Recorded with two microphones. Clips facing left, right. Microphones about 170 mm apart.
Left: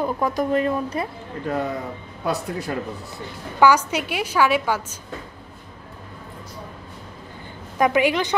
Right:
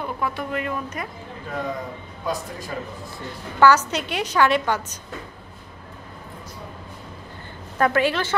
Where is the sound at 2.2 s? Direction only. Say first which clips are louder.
Left 4 dB; 70° left (ahead or behind).